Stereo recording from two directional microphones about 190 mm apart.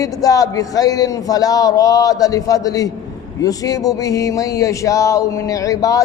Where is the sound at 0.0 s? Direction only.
20° left (ahead or behind).